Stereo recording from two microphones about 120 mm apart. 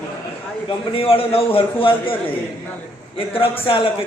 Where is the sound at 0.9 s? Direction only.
50° left (ahead or behind).